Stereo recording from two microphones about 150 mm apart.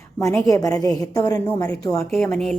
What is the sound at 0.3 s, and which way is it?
Speech, 25° left (ahead or behind).